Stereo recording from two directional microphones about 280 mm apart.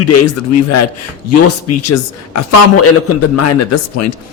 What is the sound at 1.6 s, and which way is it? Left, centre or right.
Speech, left.